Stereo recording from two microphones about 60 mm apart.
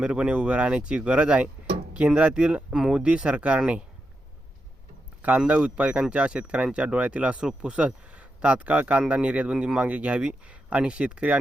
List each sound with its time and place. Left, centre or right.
0.0 s speech: centre
5.5 s speech: right